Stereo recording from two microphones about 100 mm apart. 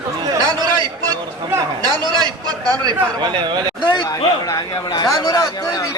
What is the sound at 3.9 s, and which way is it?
A man's voice, 40° left (ahead or behind).